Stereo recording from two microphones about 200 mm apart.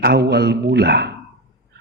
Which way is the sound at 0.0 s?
55° right (ahead or behind).